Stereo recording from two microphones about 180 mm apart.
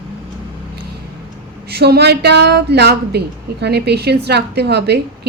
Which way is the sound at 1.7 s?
65° right (ahead or behind).